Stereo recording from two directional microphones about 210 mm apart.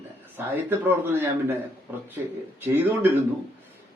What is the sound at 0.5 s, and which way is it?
A man's voice, 10° right (ahead or behind).